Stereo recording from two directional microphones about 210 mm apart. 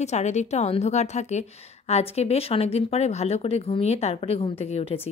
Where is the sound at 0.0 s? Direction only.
35° left (ahead or behind).